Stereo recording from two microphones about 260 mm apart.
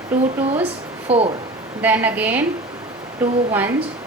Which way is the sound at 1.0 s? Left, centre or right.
Right.